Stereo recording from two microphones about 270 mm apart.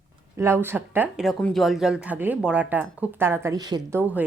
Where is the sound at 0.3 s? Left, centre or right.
Centre.